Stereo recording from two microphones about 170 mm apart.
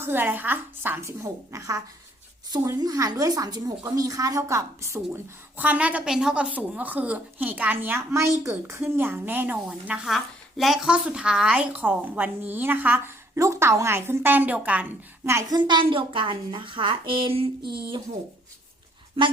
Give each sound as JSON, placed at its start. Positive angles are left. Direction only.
{"t": 0.0, "sound": "a woman's voice", "side_deg": -15}
{"t": 19.2, "sound": "a woman's voice", "side_deg": -30}